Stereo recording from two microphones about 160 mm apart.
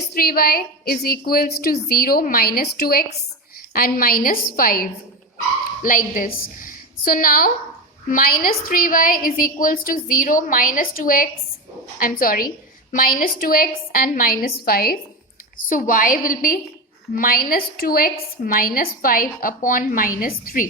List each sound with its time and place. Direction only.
0.1 s a woman's voice: 70° left (ahead or behind)